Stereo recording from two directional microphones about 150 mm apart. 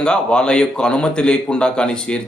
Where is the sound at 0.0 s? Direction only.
5° left (ahead or behind).